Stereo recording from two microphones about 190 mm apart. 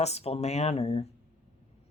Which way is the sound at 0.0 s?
35° left (ahead or behind).